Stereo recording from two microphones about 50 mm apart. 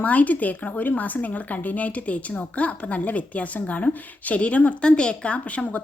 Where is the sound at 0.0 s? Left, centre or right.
Left.